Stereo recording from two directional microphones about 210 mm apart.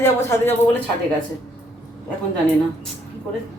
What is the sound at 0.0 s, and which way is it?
Speech, 10° left (ahead or behind).